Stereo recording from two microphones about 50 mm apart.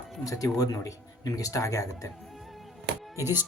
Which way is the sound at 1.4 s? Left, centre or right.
Left.